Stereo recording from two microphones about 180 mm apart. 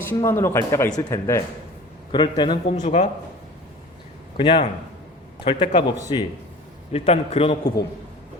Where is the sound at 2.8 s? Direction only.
40° left (ahead or behind).